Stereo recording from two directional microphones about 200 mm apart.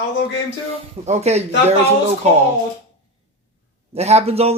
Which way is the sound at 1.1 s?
35° right (ahead or behind).